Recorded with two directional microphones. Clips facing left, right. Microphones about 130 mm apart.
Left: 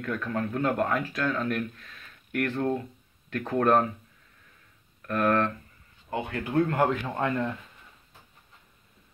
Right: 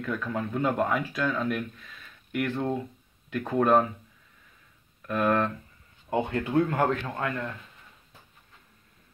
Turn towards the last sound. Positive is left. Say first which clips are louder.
# left 4 dB
turn(degrees=25)  # may be behind; listen again after turning